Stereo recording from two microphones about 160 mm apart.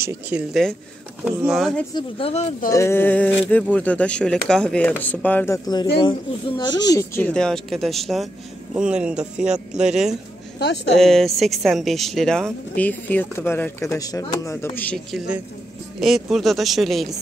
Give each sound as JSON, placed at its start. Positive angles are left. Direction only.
{"t": 0.3, "sound": "speech", "side_deg": 0}
{"t": 2.0, "sound": "speech", "side_deg": 35}
{"t": 2.7, "sound": "speech", "side_deg": 15}
{"t": 5.9, "sound": "speech", "side_deg": 30}
{"t": 10.6, "sound": "speech", "side_deg": 90}
{"t": 11.0, "sound": "speech", "side_deg": 0}